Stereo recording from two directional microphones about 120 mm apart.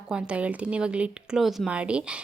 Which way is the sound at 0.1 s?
10° right (ahead or behind).